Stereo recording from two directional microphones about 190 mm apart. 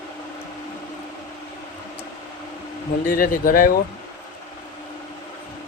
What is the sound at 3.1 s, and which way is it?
Speech, 50° left (ahead or behind).